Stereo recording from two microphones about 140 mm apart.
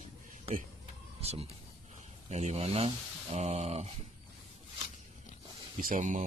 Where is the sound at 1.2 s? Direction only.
50° right (ahead or behind).